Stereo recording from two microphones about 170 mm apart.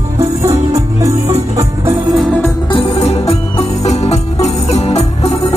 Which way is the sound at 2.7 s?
35° left (ahead or behind).